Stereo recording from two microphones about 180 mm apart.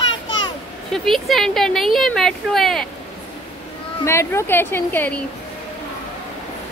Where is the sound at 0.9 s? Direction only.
Centre (ahead or behind).